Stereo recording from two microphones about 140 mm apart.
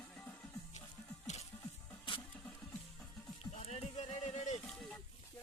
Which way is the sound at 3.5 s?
50° left (ahead or behind).